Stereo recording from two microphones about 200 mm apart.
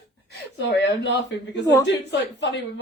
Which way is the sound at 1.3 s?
60° left (ahead or behind).